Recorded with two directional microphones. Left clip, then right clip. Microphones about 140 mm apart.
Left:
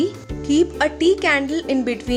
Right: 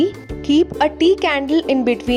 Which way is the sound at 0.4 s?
40° right (ahead or behind).